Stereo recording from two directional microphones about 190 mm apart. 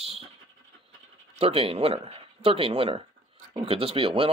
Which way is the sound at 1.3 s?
30° right (ahead or behind).